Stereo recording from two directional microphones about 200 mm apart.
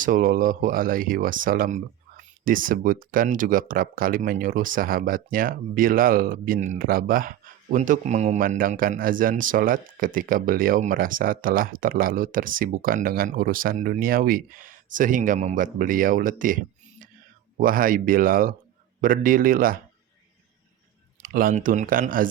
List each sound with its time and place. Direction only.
0.0 s speech: 40° right (ahead or behind)
17.6 s speech: 45° right (ahead or behind)
21.2 s speech: 45° right (ahead or behind)